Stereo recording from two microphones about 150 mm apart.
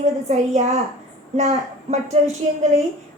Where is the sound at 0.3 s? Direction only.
50° right (ahead or behind).